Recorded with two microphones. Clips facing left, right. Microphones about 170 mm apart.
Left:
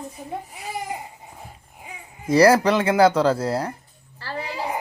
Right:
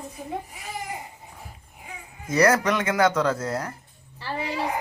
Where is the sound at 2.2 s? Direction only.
30° left (ahead or behind).